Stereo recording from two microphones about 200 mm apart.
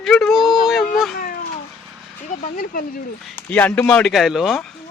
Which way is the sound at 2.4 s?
45° left (ahead or behind).